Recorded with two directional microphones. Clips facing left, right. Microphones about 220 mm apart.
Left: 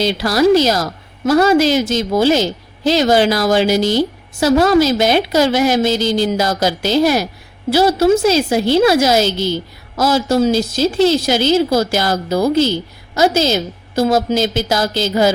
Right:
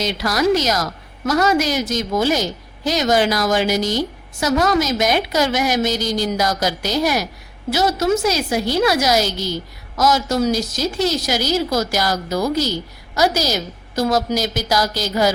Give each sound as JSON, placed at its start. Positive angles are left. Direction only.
{"t": 0.0, "sound": "a woman's voice", "side_deg": 30}